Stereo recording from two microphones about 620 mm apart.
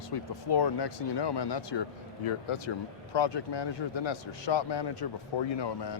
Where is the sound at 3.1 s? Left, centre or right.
Left.